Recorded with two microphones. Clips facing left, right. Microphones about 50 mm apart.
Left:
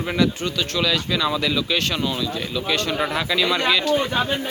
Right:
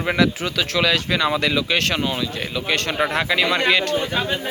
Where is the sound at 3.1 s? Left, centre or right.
Right.